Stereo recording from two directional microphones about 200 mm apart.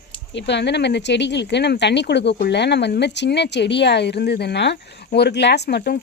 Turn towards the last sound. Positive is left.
turn(degrees=55)  # may be behind; listen again after turning